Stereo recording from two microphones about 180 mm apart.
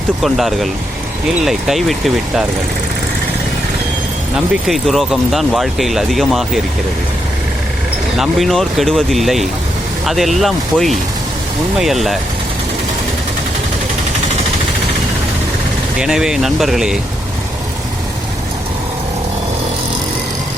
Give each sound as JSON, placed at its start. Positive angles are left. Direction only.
{"t": 0.2, "sound": "speech", "side_deg": 0}
{"t": 4.4, "sound": "speech", "side_deg": 0}
{"t": 8.2, "sound": "speech", "side_deg": 0}
{"t": 16.0, "sound": "speech", "side_deg": -5}